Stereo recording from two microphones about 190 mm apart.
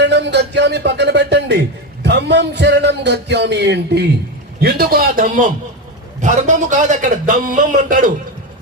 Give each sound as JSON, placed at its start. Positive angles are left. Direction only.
{"t": 0.0, "sound": "music", "side_deg": -65}
{"t": 2.0, "sound": "speech", "side_deg": -60}
{"t": 4.6, "sound": "a man's voice", "side_deg": -50}